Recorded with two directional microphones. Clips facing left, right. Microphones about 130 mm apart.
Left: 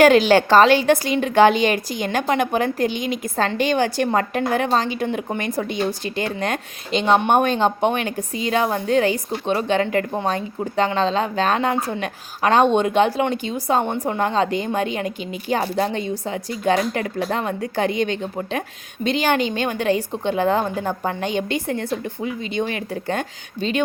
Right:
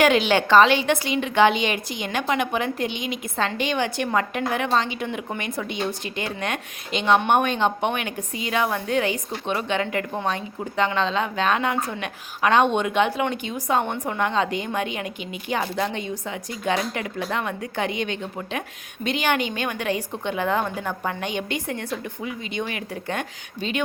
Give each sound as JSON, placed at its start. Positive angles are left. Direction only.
{"t": 0.0, "sound": "a woman's voice", "side_deg": 40}